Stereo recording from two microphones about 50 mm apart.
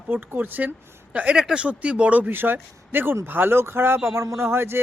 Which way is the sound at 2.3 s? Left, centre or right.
Right.